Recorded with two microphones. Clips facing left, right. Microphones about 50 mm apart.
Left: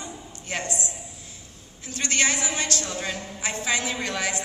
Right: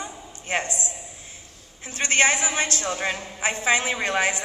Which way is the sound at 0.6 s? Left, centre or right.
Left.